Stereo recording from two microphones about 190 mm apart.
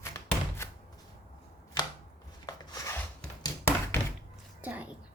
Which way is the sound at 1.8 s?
25° left (ahead or behind).